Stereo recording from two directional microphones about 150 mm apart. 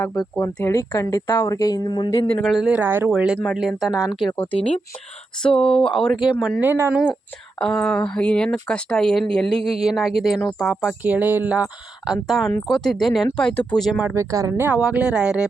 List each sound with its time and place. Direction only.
0.0 s speech: 20° left (ahead or behind)
2.4 s speech: centre (ahead or behind)
5.4 s speech: 5° left (ahead or behind)
6.6 s speech: 15° right (ahead or behind)
6.9 s speech: 5° right (ahead or behind)
12.6 s speech: centre (ahead or behind)
14.0 s speech: 15° right (ahead or behind)
14.8 s speech: 5° right (ahead or behind)